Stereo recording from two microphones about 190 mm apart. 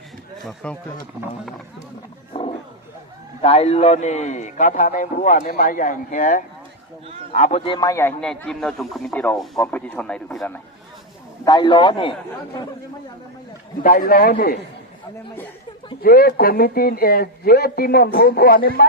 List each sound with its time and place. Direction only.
0.4 s speech: 5° left (ahead or behind)
2.3 s roaring cats: 30° left (ahead or behind)
3.4 s a man's voice: 35° left (ahead or behind); by 8.1 s 15° left (ahead or behind)
8.2 s speech: 5° left (ahead or behind)
11.4 s a man's voice: 25° left (ahead or behind)
13.8 s speech: 45° left (ahead or behind)
16.0 s speech: 50° left (ahead or behind)